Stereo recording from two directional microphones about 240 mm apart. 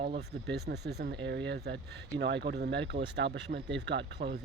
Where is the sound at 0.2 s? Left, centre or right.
Right.